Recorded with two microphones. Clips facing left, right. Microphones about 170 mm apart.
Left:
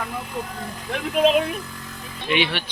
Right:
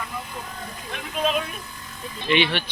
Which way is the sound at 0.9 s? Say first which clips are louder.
Left 7 dB; 65° left (ahead or behind).